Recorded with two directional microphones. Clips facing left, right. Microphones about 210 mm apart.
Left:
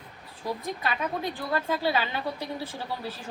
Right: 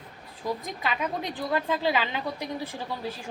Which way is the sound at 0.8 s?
15° right (ahead or behind).